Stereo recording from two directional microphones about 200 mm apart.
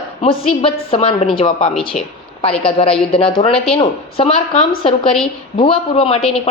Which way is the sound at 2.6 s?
25° left (ahead or behind).